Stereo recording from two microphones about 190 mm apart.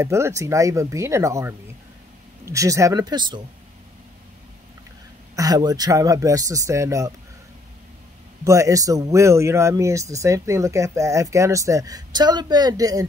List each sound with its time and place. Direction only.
0.0 s speech: 15° right (ahead or behind)
5.3 s speech: 20° right (ahead or behind)
8.5 s speech: 15° right (ahead or behind)